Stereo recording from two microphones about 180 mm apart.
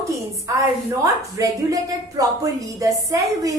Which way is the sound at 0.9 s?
20° right (ahead or behind).